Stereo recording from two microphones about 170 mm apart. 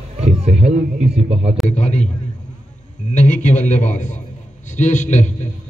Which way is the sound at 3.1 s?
45° left (ahead or behind).